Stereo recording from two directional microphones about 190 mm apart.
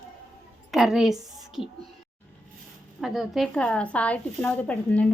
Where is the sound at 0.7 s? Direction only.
Centre (ahead or behind).